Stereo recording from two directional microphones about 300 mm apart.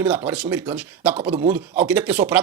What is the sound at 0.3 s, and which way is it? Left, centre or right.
Speech, centre.